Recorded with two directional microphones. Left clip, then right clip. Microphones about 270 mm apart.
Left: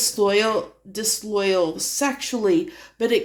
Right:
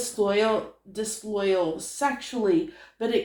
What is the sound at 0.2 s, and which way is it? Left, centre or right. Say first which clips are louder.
A woman's voice: left 3 dB; left.